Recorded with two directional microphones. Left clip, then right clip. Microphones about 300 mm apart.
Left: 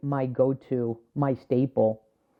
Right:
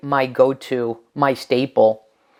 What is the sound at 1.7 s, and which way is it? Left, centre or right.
Speech, right.